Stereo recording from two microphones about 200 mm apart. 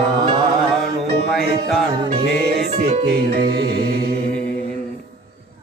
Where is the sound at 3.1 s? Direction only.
50° right (ahead or behind).